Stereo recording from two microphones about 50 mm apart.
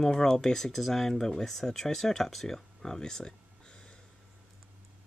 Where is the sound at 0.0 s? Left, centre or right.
Centre.